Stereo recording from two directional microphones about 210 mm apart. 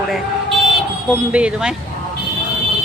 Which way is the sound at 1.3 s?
5° right (ahead or behind).